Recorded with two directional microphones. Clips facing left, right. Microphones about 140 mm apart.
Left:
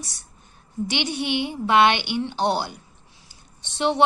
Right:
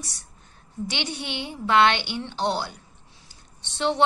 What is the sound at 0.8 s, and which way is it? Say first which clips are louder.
A woman's voice: left 5 dB; 15° left (ahead or behind).